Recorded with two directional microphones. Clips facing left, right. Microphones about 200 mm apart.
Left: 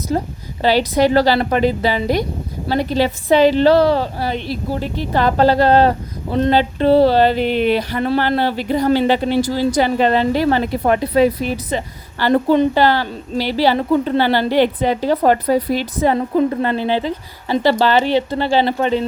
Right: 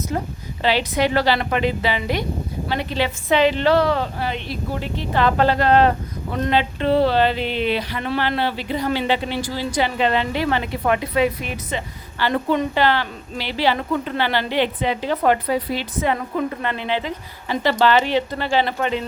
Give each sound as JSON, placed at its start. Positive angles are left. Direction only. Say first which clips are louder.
{"t": 0.1, "sound": "speech", "louder": "left 5 dB", "side_deg": 35}